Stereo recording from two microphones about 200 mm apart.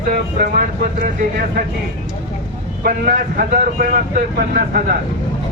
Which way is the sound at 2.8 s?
45° right (ahead or behind).